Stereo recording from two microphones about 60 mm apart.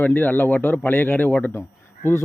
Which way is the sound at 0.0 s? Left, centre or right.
Left.